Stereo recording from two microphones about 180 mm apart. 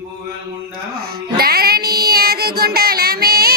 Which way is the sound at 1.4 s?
60° right (ahead or behind).